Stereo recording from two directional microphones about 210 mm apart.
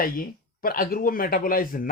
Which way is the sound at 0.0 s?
45° left (ahead or behind).